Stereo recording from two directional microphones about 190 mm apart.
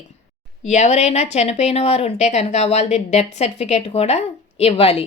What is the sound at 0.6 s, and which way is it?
Speech, 35° left (ahead or behind).